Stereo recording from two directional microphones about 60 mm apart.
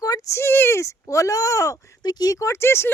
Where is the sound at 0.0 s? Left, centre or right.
Left.